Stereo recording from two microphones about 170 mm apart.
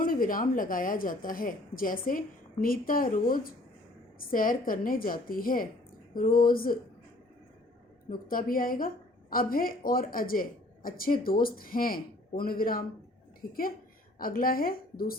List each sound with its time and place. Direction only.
0.0 s a woman's voice: 55° left (ahead or behind)
8.1 s a woman's voice: 55° left (ahead or behind)